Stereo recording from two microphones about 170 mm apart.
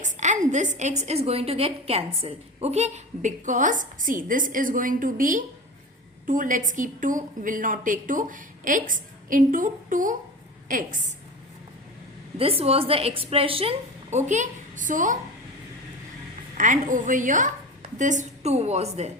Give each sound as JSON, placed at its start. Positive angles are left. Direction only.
{"t": 0.0, "sound": "a sound", "side_deg": -45}
{"t": 0.8, "sound": "a woman's voice", "side_deg": -40}
{"t": 12.4, "sound": "a woman's voice", "side_deg": -35}
{"t": 16.6, "sound": "a woman's voice", "side_deg": -50}